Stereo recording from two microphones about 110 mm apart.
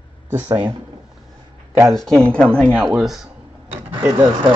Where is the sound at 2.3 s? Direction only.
20° right (ahead or behind).